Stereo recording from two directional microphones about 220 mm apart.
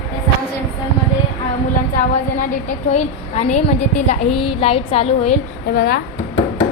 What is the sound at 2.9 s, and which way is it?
Speech, 30° left (ahead or behind).